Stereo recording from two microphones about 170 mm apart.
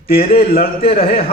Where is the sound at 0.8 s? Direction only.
35° left (ahead or behind).